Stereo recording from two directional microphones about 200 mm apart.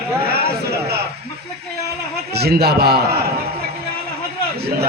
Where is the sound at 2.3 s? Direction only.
50° right (ahead or behind).